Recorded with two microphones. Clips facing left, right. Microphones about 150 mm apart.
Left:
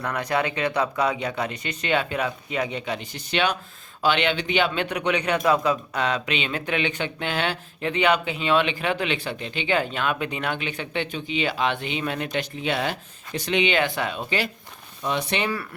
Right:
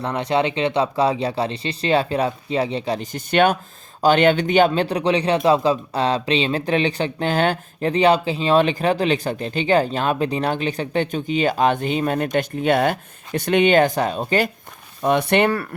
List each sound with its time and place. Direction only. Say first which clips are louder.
0.0 s speech: right 5 dB; 25° right (ahead or behind); by 14.5 s 45° right (ahead or behind)
15.0 s speech: right 9 dB; 55° right (ahead or behind)